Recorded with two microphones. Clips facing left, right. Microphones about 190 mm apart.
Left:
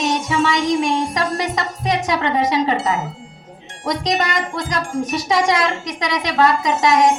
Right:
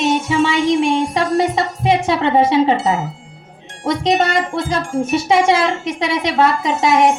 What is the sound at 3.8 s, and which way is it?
Speech, 25° right (ahead or behind).